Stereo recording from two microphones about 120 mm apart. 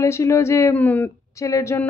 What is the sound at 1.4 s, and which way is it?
Speech, 25° left (ahead or behind).